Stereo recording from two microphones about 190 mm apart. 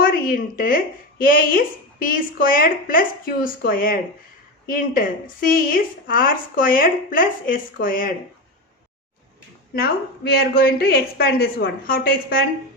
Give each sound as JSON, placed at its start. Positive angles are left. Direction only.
{"t": 0.0, "sound": "speech", "side_deg": 50}
{"t": 9.7, "sound": "speech", "side_deg": 50}